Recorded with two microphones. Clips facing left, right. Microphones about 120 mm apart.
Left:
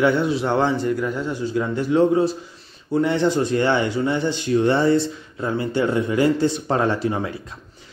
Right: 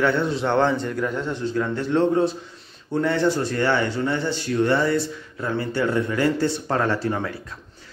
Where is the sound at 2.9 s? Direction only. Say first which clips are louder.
Left 2 dB; 20° left (ahead or behind).